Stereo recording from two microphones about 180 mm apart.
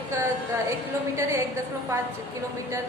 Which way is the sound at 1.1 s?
15° right (ahead or behind).